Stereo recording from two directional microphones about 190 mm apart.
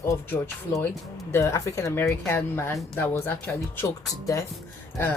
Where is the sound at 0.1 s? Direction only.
15° left (ahead or behind).